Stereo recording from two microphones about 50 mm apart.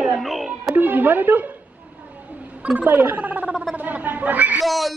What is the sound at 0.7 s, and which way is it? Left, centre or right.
Speech, right.